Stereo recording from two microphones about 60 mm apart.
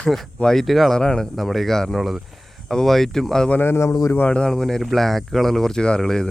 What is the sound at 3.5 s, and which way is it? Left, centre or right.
Speech, left.